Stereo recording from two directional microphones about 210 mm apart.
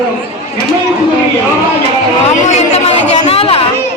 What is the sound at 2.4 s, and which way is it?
Chatter, 30° left (ahead or behind).